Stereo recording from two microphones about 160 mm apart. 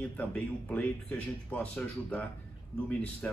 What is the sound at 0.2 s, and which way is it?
A man's voice, 10° left (ahead or behind).